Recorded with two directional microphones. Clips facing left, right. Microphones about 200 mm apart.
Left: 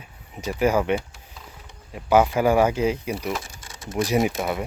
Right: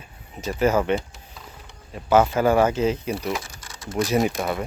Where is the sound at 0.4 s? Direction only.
10° left (ahead or behind).